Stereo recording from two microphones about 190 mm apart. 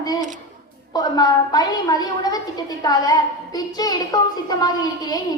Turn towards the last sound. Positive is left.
turn(degrees=20)  # may be behind; listen again after turning